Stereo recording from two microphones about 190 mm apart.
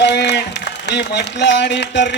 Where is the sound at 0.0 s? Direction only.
65° left (ahead or behind).